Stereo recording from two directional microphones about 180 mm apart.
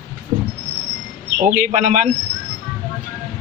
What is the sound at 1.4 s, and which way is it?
Speech, 45° right (ahead or behind).